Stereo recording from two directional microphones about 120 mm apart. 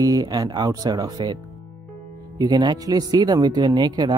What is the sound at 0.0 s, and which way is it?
Speech, 30° right (ahead or behind).